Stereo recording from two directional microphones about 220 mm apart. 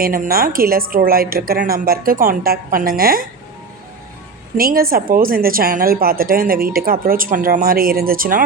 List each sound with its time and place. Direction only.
0.0 s a woman's voice: 40° right (ahead or behind)
4.5 s a woman's voice: 40° right (ahead or behind)